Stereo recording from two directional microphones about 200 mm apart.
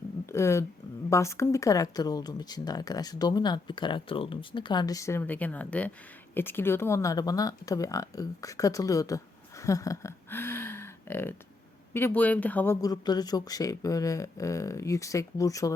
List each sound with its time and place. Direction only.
0.3 s speech: 15° left (ahead or behind)
12.8 s speech: 20° left (ahead or behind)